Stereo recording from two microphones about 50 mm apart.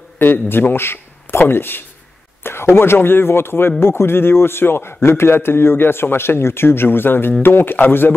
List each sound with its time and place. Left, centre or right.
0.2 s a man's voice: left